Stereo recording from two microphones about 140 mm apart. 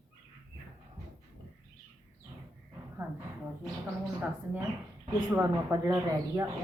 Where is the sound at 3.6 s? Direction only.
10° right (ahead or behind).